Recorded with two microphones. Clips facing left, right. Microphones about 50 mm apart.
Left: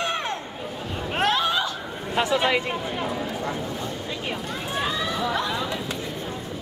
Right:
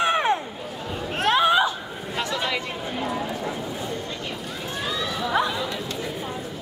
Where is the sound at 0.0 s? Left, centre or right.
Centre.